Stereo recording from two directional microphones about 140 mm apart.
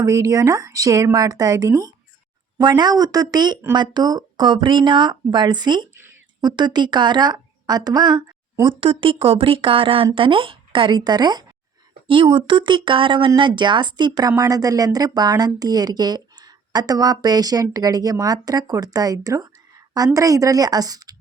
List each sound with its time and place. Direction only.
0.0 s speech: 20° right (ahead or behind)